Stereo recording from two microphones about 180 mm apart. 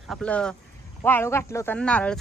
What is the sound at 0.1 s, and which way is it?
Speech, 5° left (ahead or behind).